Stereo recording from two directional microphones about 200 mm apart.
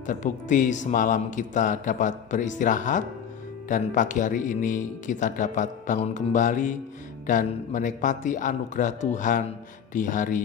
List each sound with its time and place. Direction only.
0.0 s speech: 40° left (ahead or behind)